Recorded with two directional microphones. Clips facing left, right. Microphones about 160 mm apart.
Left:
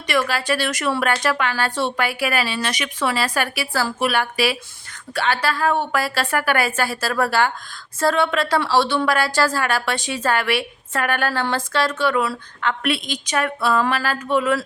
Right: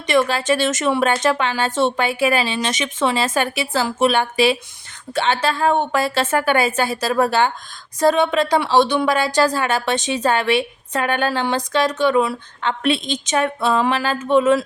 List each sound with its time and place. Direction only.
0.1 s a woman's voice: 20° right (ahead or behind)